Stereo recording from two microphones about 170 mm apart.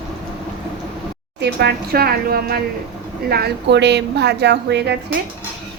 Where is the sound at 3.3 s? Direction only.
80° right.